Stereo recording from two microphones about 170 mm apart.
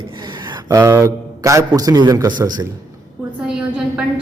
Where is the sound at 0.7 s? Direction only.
20° right (ahead or behind).